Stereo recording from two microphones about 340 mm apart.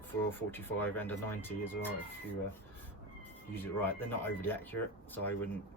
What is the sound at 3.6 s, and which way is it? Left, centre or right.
Speech, centre.